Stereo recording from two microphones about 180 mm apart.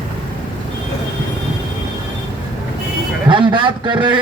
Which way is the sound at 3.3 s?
25° right (ahead or behind).